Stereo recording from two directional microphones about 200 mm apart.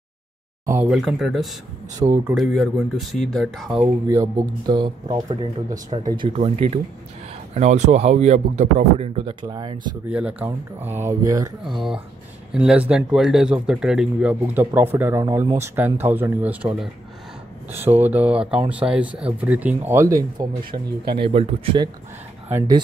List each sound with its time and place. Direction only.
0.7 s speech: 5° right (ahead or behind)
2.0 s speech: 25° right (ahead or behind)
2.3 s speech: centre (ahead or behind)
4.1 s a man's voice: 20° right (ahead or behind)
10.0 s speech: 5° right (ahead or behind)
11.6 s speech: centre (ahead or behind); by 21.8 s 30° right (ahead or behind)
22.5 s speech: 10° right (ahead or behind)